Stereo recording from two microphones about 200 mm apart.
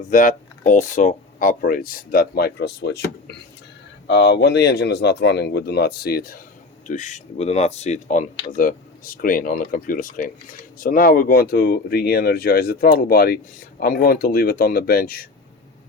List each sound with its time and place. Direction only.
0.1 s speech: 40° left (ahead or behind)
6.8 s speech: 40° left (ahead or behind)